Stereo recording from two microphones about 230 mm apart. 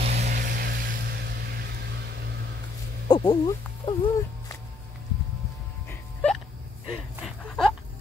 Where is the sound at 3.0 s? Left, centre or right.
Centre.